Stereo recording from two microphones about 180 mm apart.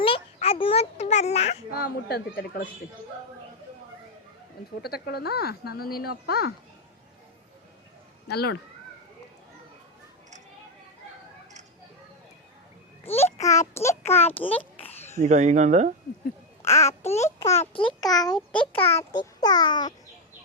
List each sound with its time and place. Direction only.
0.0 s a sound: 30° left (ahead or behind)
1.7 s speech: 60° left (ahead or behind)
4.8 s speech: 60° left (ahead or behind)
8.3 s speech: 60° left (ahead or behind)
13.1 s a child's voice: 35° left (ahead or behind)
13.4 s a child's voice: 20° left (ahead or behind)
14.8 s a sound: 35° left (ahead or behind)
15.2 s speech: 40° right (ahead or behind)
16.6 s a child's voice: 15° left (ahead or behind)
17.5 s a child's voice: 30° left (ahead or behind)